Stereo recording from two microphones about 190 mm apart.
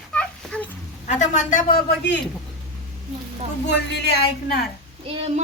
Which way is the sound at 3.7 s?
60° left (ahead or behind).